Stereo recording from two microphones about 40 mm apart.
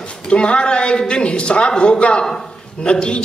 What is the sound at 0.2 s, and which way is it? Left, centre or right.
A man's voice, left.